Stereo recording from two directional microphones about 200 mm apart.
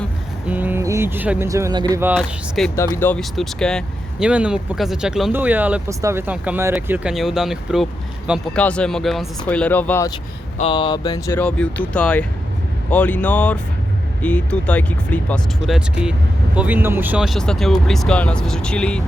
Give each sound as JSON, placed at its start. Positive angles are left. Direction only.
{"t": 0.4, "sound": "speech", "side_deg": -10}
{"t": 2.1, "sound": "speech", "side_deg": 0}
{"t": 2.7, "sound": "speech", "side_deg": 15}
{"t": 10.6, "sound": "speech", "side_deg": 25}
{"t": 11.3, "sound": "speech", "side_deg": 5}